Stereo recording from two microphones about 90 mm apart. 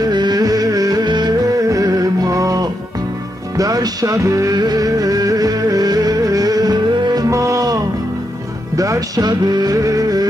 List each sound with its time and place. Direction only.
0.0 s music: 50° right (ahead or behind)
1.7 s music: 40° right (ahead or behind)
7.2 s music: 35° right (ahead or behind)